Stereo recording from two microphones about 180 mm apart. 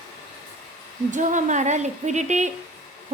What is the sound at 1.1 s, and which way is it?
A woman's voice, 45° right (ahead or behind).